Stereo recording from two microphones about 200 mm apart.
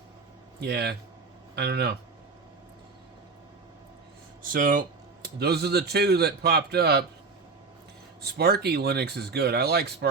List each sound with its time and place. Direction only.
0.6 s speech: 55° right (ahead or behind)
4.4 s speech: 45° right (ahead or behind)
8.2 s speech: 55° right (ahead or behind)